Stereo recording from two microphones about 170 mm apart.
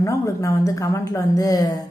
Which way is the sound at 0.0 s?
20° left (ahead or behind).